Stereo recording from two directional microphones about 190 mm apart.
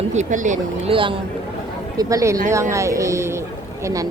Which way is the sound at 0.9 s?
25° right (ahead or behind).